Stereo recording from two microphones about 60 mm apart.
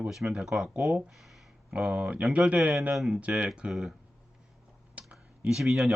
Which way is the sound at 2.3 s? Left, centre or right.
Right.